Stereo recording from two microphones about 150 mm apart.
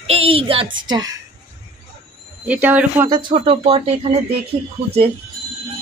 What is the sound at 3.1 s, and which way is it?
Speech, 35° right (ahead or behind).